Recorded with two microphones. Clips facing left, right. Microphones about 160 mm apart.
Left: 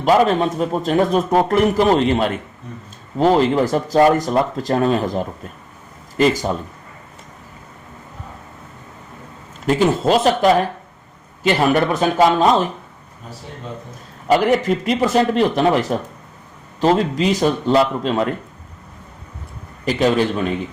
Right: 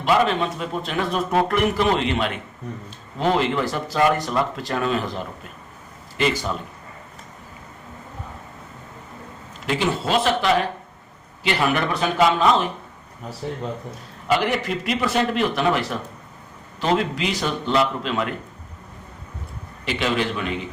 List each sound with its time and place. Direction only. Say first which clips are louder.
0.0 s a man's voice: left 5 dB; 40° left (ahead or behind)
9.6 s a man's voice: left 7 dB; 45° left (ahead or behind)
14.3 s a man's voice: left 6 dB; 40° left (ahead or behind)
19.8 s a man's voice: left 7 dB; 40° left (ahead or behind)